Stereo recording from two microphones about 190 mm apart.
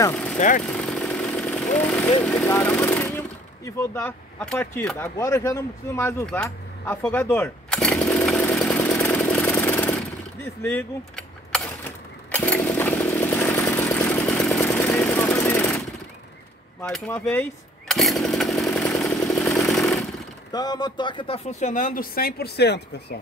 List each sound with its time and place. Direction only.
0.1 s vehicle: 5° left (ahead or behind)
0.7 s a sound: 5° left (ahead or behind)
2.0 s speech: 15° left (ahead or behind)
8.4 s chainsaw: 5° left (ahead or behind)
16.8 s chainsaw: 5° left (ahead or behind)
20.5 s speech: 20° left (ahead or behind); by 23.1 s 60° left (ahead or behind)